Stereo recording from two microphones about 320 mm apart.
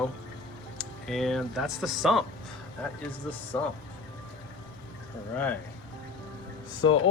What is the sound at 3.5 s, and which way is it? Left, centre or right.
Speech, centre.